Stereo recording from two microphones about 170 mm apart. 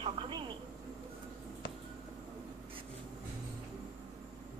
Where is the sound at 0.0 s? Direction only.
30° right (ahead or behind).